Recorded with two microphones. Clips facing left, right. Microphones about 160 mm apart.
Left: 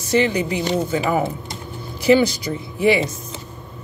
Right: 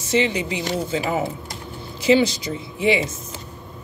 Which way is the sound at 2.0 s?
25° right (ahead or behind).